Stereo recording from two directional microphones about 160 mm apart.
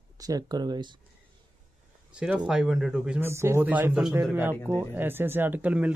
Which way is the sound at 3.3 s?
15° right (ahead or behind).